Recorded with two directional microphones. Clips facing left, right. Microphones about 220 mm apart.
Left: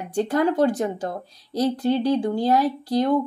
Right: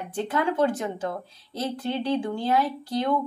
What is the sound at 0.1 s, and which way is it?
A woman's voice, 40° left (ahead or behind).